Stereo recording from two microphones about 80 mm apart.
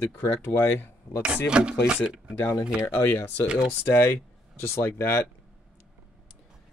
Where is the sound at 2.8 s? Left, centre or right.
Left.